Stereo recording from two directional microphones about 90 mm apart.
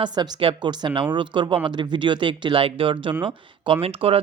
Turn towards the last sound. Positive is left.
turn(degrees=-90)